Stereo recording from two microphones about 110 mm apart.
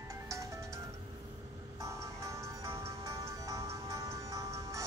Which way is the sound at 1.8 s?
25° right (ahead or behind).